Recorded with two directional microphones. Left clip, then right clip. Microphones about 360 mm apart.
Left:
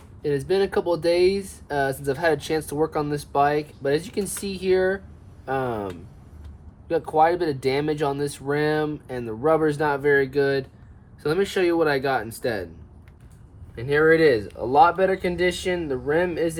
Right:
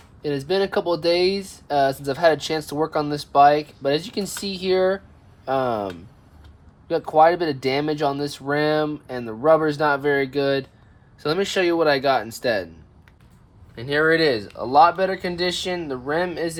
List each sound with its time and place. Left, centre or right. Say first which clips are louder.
0.2 s speech: even; centre
13.7 s speech: left 1 dB; centre